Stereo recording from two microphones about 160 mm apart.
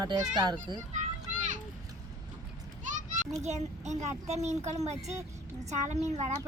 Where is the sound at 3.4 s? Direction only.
45° right (ahead or behind).